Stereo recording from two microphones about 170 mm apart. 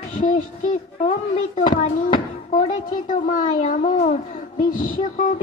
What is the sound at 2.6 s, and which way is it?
A child's voice, 55° left (ahead or behind).